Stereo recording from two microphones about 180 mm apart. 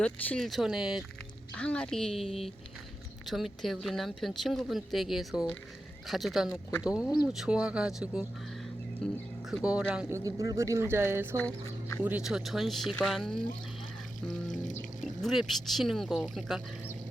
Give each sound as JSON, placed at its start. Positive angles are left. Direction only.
{"t": 0.0, "sound": "speech", "side_deg": 5}
{"t": 11.3, "sound": "speech", "side_deg": 10}
{"t": 12.0, "sound": "speech", "side_deg": -5}
{"t": 14.6, "sound": "music", "side_deg": 45}
{"t": 15.2, "sound": "speech", "side_deg": 0}